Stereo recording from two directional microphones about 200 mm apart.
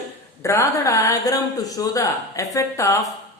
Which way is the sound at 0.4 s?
15° left (ahead or behind).